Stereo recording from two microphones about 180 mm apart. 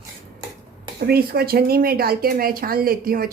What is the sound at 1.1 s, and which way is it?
Speech, 60° right (ahead or behind).